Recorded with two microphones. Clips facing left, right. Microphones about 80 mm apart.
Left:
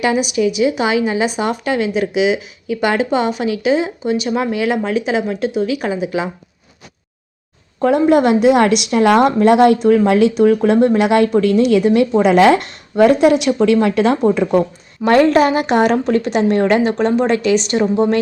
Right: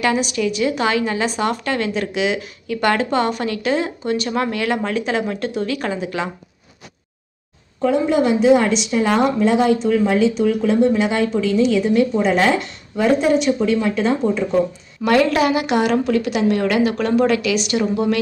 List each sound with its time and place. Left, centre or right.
0.0 s a woman's voice: centre
7.8 s a woman's voice: left
13.7 s a woman's voice: left
15.0 s a woman's voice: left